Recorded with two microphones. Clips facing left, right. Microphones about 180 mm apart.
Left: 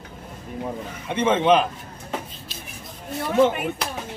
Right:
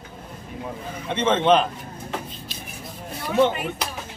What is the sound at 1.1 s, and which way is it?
Speech, 10° left (ahead or behind).